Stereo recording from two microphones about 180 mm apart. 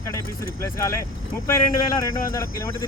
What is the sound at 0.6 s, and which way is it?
Speech, 15° left (ahead or behind).